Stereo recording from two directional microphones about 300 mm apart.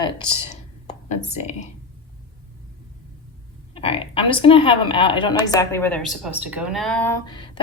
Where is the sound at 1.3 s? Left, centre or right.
Left.